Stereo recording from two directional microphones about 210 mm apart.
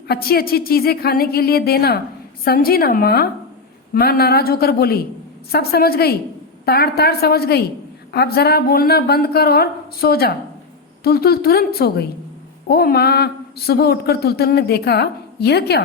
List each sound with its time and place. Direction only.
0.1 s speech: 45° left (ahead or behind)